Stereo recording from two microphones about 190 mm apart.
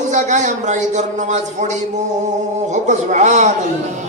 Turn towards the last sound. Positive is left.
turn(degrees=-40)  # may be behind; listen again after turning